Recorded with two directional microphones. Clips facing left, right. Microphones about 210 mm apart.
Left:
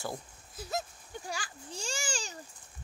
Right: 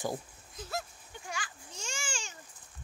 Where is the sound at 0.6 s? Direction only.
20° left (ahead or behind).